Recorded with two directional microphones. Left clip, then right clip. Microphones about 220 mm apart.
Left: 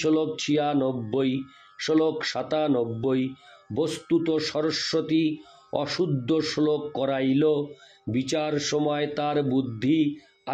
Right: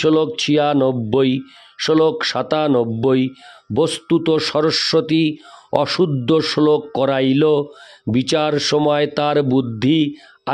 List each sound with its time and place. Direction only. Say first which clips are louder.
0.0 s speech: right 8 dB; 50° right (ahead or behind)